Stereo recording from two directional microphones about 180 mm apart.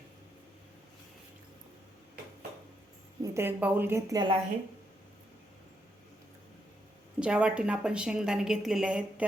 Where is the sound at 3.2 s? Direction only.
15° right (ahead or behind).